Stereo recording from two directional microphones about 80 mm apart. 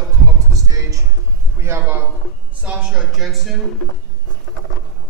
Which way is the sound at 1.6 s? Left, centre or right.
Right.